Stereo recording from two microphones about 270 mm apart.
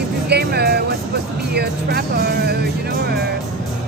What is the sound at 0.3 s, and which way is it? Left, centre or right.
Music, right.